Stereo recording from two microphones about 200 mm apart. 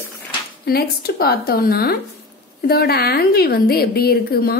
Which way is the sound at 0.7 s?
50° left (ahead or behind).